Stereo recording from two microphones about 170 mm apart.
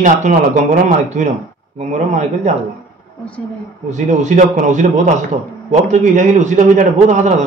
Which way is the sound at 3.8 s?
45° right (ahead or behind).